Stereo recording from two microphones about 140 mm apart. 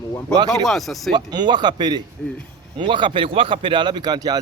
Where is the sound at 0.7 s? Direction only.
Centre (ahead or behind).